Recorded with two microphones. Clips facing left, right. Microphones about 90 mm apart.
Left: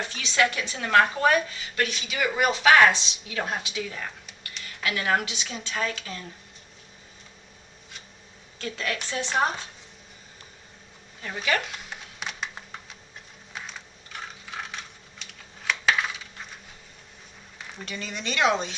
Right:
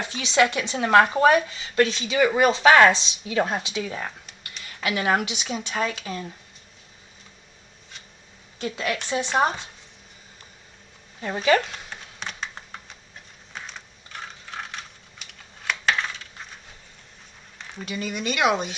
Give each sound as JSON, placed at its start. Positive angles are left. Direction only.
{"t": 0.0, "sound": "speech", "side_deg": -20}
{"t": 8.5, "sound": "speech", "side_deg": -20}
{"t": 11.2, "sound": "speech", "side_deg": -30}
{"t": 11.9, "sound": "computer keyboard", "side_deg": 5}
{"t": 13.5, "sound": "coin", "side_deg": 0}
{"t": 17.6, "sound": "speech", "side_deg": 0}